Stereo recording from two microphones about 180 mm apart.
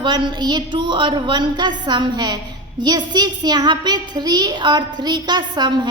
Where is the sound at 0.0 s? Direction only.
25° right (ahead or behind).